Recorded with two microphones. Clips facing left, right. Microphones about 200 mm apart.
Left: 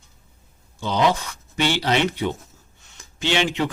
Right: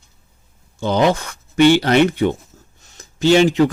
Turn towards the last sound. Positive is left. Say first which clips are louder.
# right 10 dB
turn(degrees=-40)  # may be behind; listen again after turning